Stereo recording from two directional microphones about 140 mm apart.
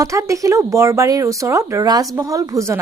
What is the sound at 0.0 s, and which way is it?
A woman's voice, 20° right (ahead or behind).